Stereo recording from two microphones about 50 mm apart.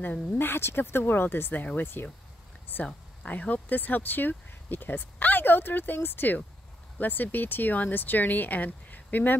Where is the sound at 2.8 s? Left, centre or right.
Left.